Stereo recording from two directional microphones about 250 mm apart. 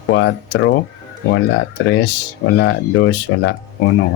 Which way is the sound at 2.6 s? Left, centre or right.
Left.